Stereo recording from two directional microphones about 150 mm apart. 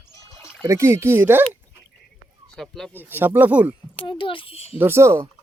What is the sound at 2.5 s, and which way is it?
Speech, centre (ahead or behind).